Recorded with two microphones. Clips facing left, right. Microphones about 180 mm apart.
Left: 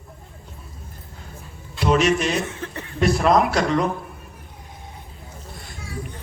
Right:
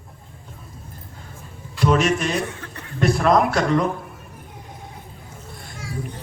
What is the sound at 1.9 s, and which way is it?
Speech, 50° right (ahead or behind).